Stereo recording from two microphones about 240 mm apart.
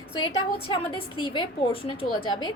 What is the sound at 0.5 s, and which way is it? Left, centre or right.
A woman's voice, left.